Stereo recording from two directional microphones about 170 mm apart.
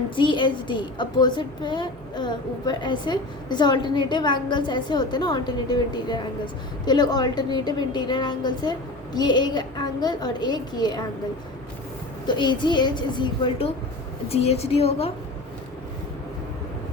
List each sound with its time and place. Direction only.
0.2 s a woman's voice: 30° left (ahead or behind)
12.4 s a woman's voice: 25° left (ahead or behind)